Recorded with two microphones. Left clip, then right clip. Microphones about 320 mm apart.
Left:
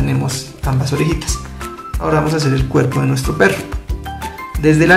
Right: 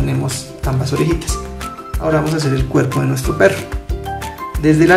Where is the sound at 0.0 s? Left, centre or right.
Centre.